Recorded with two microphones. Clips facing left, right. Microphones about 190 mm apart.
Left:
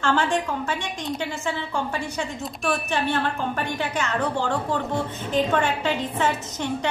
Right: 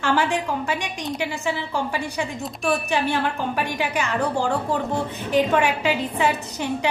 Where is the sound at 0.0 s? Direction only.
10° right (ahead or behind).